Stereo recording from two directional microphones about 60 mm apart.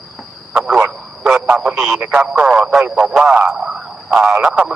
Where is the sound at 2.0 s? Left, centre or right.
Centre.